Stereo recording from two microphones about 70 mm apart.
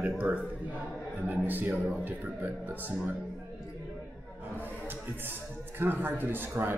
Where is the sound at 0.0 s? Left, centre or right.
Centre.